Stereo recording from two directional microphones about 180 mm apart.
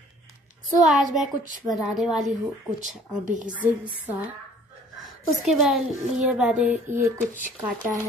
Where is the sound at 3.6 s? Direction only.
10° right (ahead or behind).